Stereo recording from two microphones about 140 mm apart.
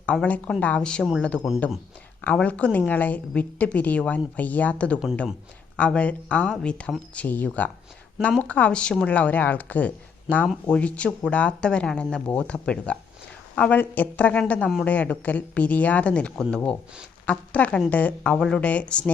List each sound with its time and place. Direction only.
0.0 s speech: 10° left (ahead or behind)